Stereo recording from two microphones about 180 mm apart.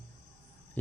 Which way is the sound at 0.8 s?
10° left (ahead or behind).